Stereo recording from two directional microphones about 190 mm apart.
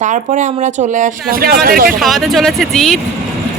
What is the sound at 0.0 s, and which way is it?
Speech, 40° right (ahead or behind).